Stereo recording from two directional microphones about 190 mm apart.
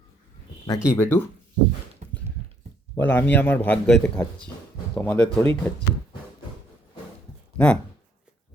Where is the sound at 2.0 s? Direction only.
45° right (ahead or behind).